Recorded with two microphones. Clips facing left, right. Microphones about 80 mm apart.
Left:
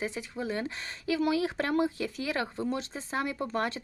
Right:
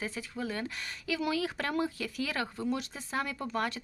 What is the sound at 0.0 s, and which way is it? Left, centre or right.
Speech, left.